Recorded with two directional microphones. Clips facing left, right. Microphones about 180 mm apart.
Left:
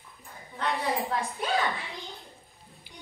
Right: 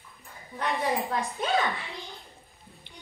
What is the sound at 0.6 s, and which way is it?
Speech, 15° right (ahead or behind).